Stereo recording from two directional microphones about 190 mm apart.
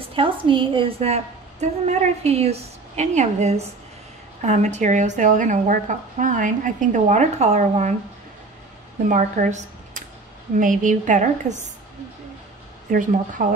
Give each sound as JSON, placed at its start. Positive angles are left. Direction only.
{"t": 0.0, "sound": "a woman's voice", "side_deg": -30}
{"t": 9.1, "sound": "a woman's voice", "side_deg": -40}
{"t": 12.9, "sound": "a woman's voice", "side_deg": -45}